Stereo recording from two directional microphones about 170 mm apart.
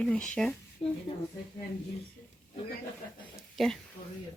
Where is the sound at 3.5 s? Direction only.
Centre (ahead or behind).